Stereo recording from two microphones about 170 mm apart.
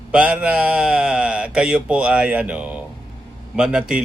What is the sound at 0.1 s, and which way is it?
Speech, 10° right (ahead or behind).